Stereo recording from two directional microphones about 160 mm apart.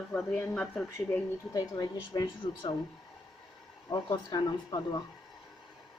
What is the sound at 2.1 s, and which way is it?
Speech, 25° left (ahead or behind).